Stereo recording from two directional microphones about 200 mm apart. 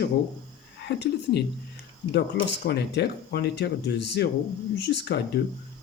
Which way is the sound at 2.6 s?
55° left (ahead or behind).